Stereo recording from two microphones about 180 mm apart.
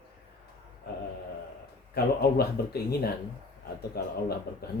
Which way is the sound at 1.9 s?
60° left (ahead or behind).